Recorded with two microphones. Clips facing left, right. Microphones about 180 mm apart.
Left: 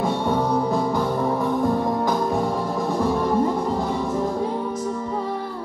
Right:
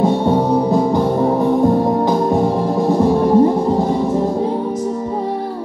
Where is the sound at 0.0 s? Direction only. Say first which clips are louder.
Right 7 dB; 25° right (ahead or behind).